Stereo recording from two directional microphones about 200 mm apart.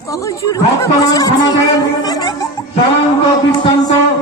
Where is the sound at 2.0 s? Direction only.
20° left (ahead or behind).